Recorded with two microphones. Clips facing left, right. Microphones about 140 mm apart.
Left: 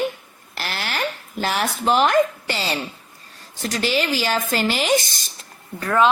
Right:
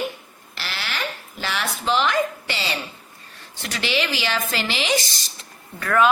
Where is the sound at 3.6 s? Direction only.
40° left (ahead or behind).